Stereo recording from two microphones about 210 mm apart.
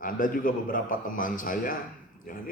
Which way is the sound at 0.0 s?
40° left (ahead or behind).